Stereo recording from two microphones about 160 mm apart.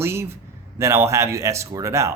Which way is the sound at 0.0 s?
15° right (ahead or behind).